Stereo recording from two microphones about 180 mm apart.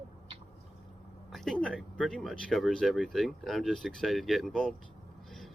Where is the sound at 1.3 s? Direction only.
Centre (ahead or behind).